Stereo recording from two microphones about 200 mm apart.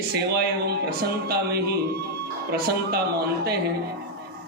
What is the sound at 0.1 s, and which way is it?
Speech, 50° right (ahead or behind).